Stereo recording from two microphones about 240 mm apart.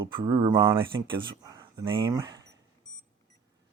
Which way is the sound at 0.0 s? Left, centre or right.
Centre.